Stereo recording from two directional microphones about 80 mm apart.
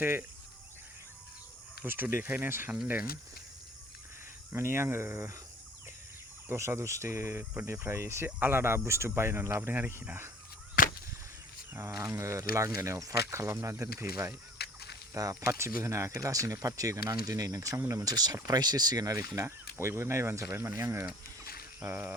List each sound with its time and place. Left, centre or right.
0.0 s speech: right
1.8 s speech: right
4.5 s speech: right
6.5 s speech: right
11.7 s speech: right
12.0 s speech: right
19.7 s speech: right